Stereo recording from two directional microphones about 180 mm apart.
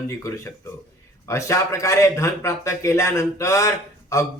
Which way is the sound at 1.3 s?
15° left (ahead or behind).